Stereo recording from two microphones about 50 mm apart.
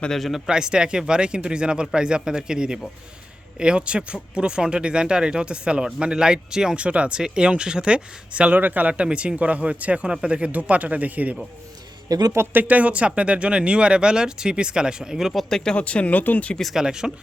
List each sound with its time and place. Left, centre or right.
0.1 s speech: centre
0.4 s speech: centre
6.7 s speech: right
8.5 s a man's voice: right
12.5 s speech: right; by 15.3 s centre
15.3 s speech: centre
15.7 s speech: left
16.7 s speech: centre